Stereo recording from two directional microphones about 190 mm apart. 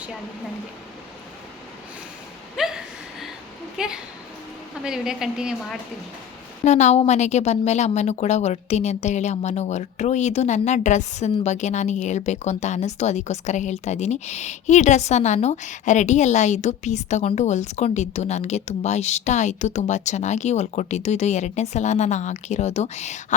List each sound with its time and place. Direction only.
2.6 s a sound: centre (ahead or behind)
3.8 s a woman's voice: 5° right (ahead or behind)
6.7 s a woman's voice: 40° left (ahead or behind)